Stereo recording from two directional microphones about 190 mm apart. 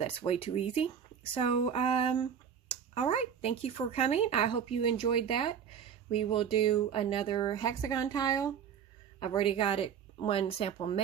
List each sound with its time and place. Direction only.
0.0 s speech: 30° left (ahead or behind)